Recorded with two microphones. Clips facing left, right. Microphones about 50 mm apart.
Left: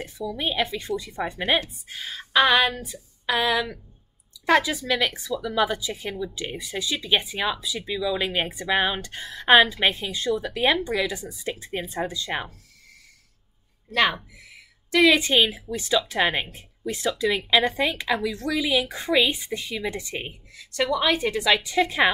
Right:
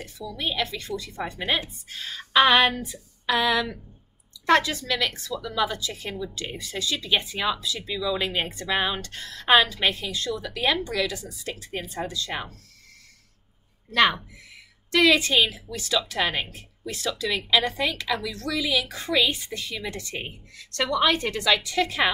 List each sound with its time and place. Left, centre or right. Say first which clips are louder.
0.3 s a woman's voice: left 2 dB; centre
2.4 s a sound: right 1 dB; centre
2.9 s a woman's voice: right 1 dB; centre
14.9 s a woman's voice: left 1 dB; centre